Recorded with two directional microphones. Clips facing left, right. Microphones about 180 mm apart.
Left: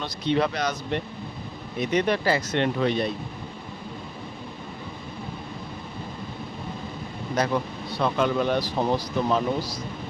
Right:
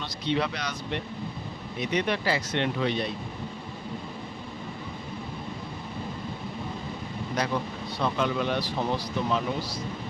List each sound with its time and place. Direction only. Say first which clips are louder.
0.0 s speech: left 4 dB; 45° left (ahead or behind)
7.4 s speech: left 4 dB; 45° left (ahead or behind)